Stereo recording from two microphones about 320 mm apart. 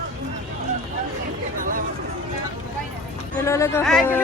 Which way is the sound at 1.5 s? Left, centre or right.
Right.